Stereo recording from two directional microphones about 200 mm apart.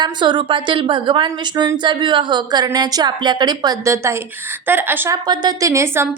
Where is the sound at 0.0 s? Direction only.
20° right (ahead or behind).